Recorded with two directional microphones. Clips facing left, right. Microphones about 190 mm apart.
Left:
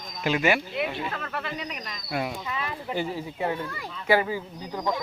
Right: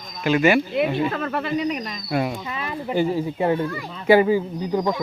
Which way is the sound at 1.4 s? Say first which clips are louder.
Right 11 dB; 20° right (ahead or behind).